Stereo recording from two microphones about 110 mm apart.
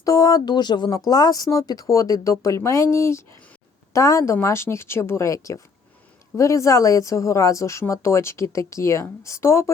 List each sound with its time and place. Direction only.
0.0 s speech: 30° left (ahead or behind)